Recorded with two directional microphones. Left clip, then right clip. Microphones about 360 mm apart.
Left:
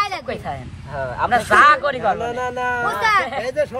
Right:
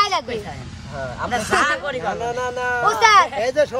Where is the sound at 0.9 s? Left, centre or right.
Left.